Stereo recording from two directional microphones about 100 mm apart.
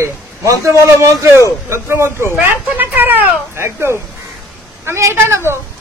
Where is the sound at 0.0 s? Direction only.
30° right (ahead or behind).